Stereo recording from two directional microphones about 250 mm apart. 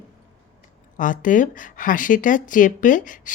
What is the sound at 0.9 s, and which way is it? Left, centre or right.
Speech, left.